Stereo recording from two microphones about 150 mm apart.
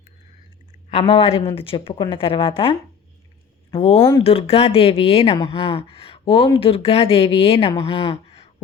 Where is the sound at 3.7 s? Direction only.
40° left (ahead or behind).